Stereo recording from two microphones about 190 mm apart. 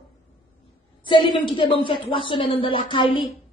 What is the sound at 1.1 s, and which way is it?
Speech, 25° left (ahead or behind).